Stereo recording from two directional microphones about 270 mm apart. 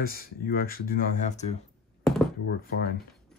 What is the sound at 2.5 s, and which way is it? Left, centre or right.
Speech, left.